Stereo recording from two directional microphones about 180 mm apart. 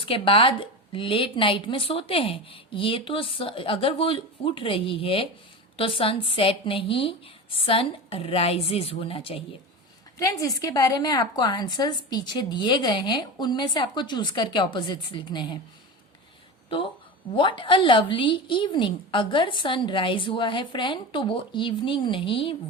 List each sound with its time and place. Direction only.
0.0 s a woman's voice: 30° left (ahead or behind)
10.4 s a woman's voice: 20° left (ahead or behind)
16.6 s a woman's voice: 30° left (ahead or behind)